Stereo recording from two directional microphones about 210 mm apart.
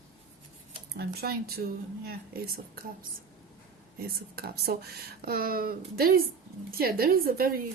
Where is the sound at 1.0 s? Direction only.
45° right (ahead or behind).